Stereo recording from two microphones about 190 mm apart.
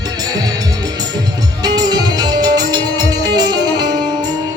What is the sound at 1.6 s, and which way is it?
Music, 20° right (ahead or behind).